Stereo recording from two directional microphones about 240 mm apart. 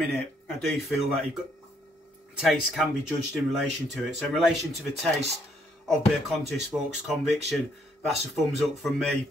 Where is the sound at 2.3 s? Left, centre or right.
Centre.